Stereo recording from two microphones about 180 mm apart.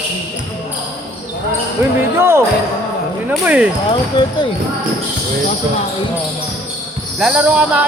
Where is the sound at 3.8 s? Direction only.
25° left (ahead or behind).